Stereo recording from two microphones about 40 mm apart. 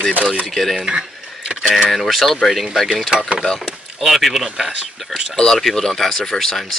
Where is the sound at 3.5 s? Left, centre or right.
Centre.